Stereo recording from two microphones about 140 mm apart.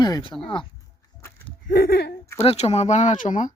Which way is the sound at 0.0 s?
35° left (ahead or behind).